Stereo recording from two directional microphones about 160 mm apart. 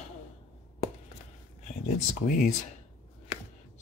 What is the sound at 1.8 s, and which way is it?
Speech, 50° left (ahead or behind).